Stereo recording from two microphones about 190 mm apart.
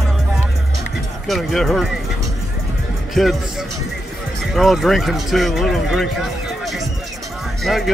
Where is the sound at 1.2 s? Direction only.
Centre (ahead or behind).